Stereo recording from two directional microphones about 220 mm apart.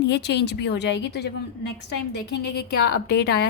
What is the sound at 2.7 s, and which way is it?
Speech, 45° left (ahead or behind).